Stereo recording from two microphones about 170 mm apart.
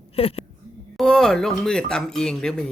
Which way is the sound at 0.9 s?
5° left (ahead or behind).